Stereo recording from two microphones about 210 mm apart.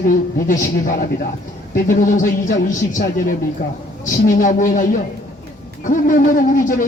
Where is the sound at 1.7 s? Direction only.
40° left (ahead or behind).